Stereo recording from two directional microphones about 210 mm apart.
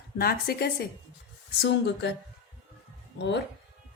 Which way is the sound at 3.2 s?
55° left (ahead or behind).